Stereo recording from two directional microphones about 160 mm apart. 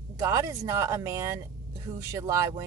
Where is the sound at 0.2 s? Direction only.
20° right (ahead or behind).